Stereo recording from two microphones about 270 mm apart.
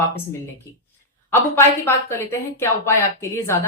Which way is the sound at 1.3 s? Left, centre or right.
Centre.